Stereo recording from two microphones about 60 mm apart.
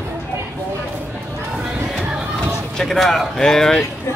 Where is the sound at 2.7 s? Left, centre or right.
Centre.